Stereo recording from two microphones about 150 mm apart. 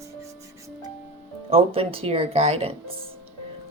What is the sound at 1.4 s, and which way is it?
Speech, 40° right (ahead or behind).